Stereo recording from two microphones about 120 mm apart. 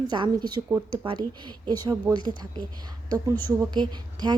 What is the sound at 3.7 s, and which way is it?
Speech, 35° right (ahead or behind).